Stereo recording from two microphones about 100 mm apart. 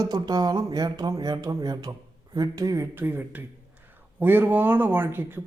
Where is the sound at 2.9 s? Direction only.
20° right (ahead or behind).